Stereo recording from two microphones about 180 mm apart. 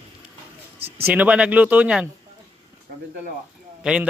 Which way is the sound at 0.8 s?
35° right (ahead or behind).